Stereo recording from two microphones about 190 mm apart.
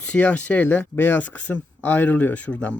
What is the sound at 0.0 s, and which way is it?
Speech, 5° left (ahead or behind).